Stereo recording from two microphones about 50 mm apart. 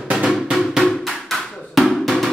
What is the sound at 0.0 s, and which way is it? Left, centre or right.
Drum, centre.